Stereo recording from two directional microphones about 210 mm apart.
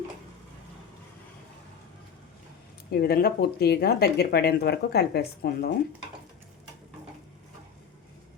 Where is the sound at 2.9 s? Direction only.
45° left (ahead or behind).